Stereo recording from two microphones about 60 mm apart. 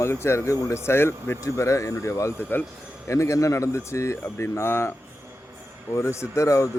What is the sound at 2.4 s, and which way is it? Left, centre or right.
Speech, left.